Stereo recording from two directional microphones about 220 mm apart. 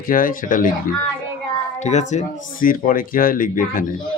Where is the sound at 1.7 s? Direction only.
30° left (ahead or behind).